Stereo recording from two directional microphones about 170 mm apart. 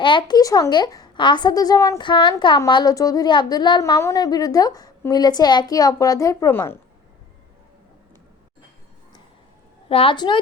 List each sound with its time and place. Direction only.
0.0 s a woman's voice: 30° left (ahead or behind)
9.9 s a woman's voice: 30° left (ahead or behind)